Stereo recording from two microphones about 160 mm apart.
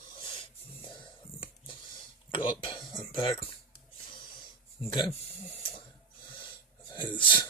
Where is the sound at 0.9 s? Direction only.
30° left (ahead or behind).